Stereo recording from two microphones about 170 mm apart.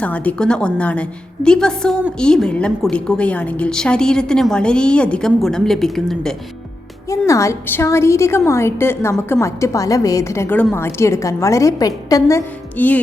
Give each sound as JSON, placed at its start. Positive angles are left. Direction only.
{"t": 0.0, "sound": "a woman's voice", "side_deg": 10}
{"t": 7.1, "sound": "a woman's voice", "side_deg": 20}